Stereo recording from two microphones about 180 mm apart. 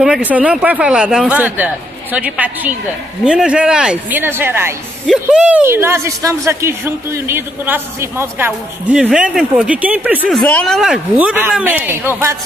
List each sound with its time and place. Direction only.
0.0 s speech: 5° right (ahead or behind)
10.3 s speech: 5° left (ahead or behind); by 12.4 s 15° right (ahead or behind)